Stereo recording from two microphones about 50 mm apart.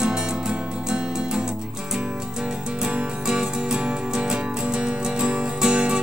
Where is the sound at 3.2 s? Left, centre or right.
Centre.